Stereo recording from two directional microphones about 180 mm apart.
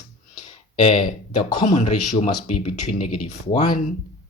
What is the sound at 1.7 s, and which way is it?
Speech, 40° left (ahead or behind).